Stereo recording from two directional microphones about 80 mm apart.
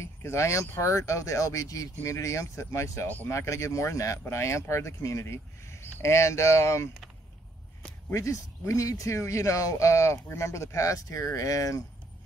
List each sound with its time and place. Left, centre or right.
0.0 s speech: left
8.1 s speech: left